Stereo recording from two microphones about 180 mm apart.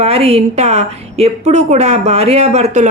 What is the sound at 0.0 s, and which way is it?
Speech, 35° right (ahead or behind).